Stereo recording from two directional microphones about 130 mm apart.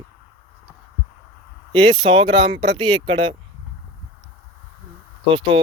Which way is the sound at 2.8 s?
40° right (ahead or behind).